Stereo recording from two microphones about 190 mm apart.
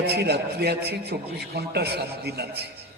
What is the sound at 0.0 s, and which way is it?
A man's voice, 60° right (ahead or behind).